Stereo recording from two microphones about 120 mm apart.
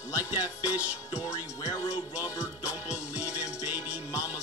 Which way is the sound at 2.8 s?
10° right (ahead or behind).